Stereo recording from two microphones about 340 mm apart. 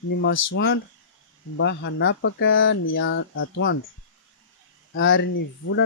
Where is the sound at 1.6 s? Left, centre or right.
Left.